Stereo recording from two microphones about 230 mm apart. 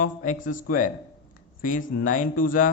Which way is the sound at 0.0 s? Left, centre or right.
Left.